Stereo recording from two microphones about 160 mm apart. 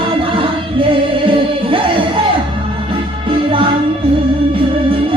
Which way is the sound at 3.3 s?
35° right (ahead or behind).